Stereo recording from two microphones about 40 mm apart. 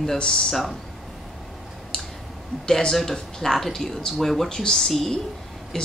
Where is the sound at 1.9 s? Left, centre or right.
Left.